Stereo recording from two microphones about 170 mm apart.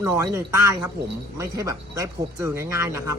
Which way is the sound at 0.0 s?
15° right (ahead or behind).